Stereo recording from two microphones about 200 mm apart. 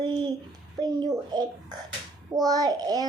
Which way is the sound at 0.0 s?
20° right (ahead or behind).